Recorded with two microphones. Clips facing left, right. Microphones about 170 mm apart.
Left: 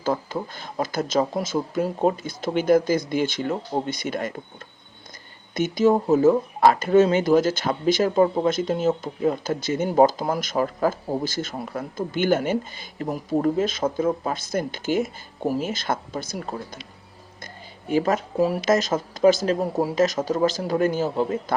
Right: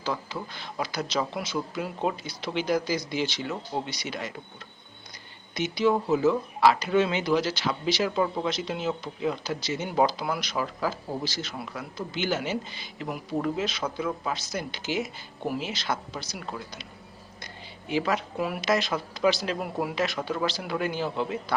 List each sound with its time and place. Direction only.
0.0 s speech: 50° left (ahead or behind)
5.5 s speech: 50° left (ahead or behind)